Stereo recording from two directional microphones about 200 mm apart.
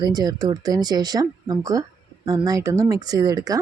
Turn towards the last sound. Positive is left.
turn(degrees=-20)  # may be behind; listen again after turning